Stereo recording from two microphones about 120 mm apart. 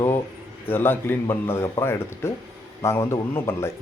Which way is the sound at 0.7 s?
20° left (ahead or behind).